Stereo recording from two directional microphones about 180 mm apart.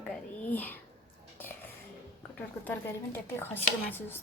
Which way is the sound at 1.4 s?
10° left (ahead or behind).